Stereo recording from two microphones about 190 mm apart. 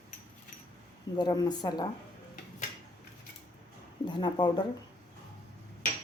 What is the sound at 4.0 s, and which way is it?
Speech, 25° left (ahead or behind).